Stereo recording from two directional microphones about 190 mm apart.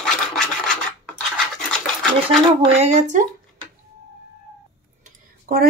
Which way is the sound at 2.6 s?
35° right (ahead or behind).